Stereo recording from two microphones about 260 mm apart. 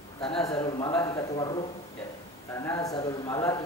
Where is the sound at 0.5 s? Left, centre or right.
Centre.